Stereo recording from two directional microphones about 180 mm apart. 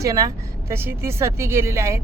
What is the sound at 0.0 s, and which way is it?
Speech, 20° right (ahead or behind).